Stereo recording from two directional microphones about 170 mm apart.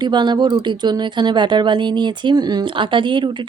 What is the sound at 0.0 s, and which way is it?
Speech, 25° right (ahead or behind).